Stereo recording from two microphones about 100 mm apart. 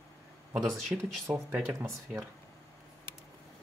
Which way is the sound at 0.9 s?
15° right (ahead or behind).